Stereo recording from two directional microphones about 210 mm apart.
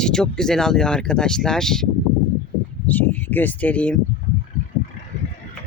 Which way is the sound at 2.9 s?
10° left (ahead or behind).